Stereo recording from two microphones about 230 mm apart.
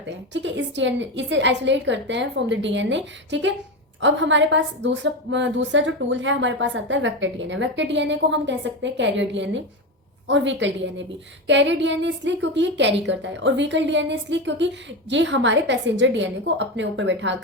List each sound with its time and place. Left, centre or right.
0.3 s a woman's voice: right